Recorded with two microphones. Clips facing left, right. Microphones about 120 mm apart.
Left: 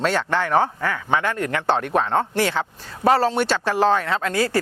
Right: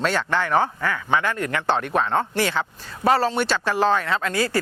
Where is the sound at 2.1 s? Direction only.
35° left (ahead or behind).